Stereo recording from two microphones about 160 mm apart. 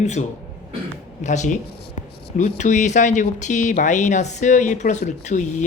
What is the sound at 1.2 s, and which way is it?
Speech, 50° left (ahead or behind).